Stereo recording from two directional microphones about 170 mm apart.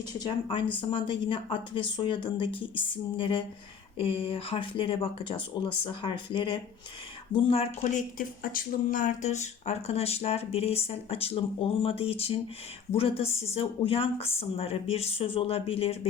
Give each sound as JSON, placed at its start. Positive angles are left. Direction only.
{"t": 0.1, "sound": "speech", "side_deg": 25}